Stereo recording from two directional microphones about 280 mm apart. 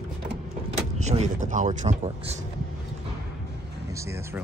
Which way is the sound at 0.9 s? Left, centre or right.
Right.